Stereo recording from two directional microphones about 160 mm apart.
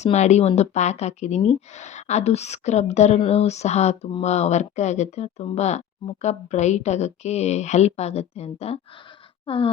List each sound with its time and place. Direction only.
0.0 s speech: 45° left (ahead or behind)